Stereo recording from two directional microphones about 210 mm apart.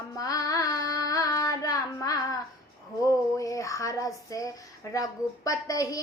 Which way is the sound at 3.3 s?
15° left (ahead or behind).